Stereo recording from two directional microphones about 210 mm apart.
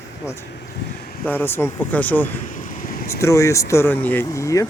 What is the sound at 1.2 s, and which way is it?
Speech, 10° left (ahead or behind).